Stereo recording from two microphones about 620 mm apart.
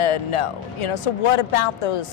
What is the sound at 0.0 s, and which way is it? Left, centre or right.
A woman's voice, left.